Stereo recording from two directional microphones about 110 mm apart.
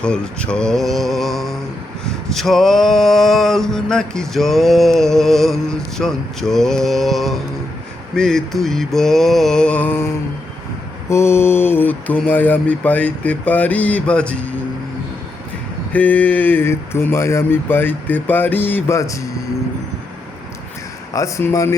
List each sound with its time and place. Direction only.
0.0 s male singing: 10° left (ahead or behind)
11.1 s mantra: 25° left (ahead or behind)
15.9 s speech: 15° left (ahead or behind)
21.1 s speech: 25° left (ahead or behind)